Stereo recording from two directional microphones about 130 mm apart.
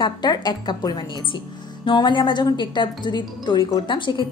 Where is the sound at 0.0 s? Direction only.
35° left (ahead or behind).